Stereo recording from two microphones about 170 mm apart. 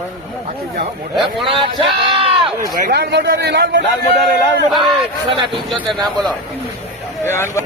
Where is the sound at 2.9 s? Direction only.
80° right.